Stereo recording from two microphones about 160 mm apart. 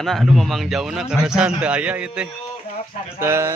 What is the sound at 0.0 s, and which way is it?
A man's voice, centre (ahead or behind).